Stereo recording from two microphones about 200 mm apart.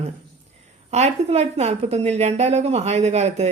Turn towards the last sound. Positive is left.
turn(degrees=-35)  # may be behind; listen again after turning